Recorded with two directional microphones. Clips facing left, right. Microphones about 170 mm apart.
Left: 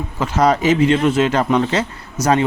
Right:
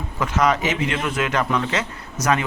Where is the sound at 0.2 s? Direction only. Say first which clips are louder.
Left 4 dB; 30° left (ahead or behind).